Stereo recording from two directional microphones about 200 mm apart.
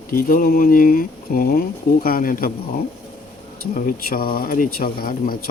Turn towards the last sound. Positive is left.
turn(degrees=45)  # may be behind; listen again after turning